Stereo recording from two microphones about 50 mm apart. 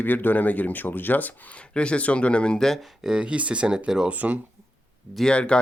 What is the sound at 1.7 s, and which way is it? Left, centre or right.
Speech, left.